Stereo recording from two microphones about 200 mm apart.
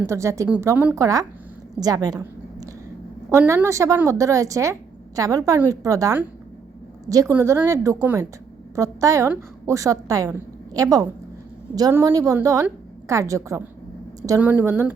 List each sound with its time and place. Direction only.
0.0 s a woman's voice: 15° right (ahead or behind)